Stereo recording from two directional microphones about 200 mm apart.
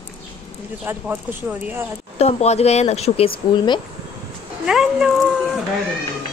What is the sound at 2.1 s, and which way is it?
Speech, 30° left (ahead or behind).